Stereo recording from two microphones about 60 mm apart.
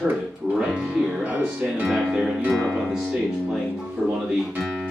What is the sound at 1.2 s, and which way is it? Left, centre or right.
Speech, right.